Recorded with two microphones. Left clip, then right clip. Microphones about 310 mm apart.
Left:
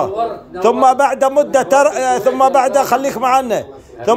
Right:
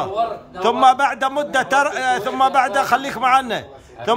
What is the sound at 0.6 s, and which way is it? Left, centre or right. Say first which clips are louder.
A man's voice: left 3 dB; centre.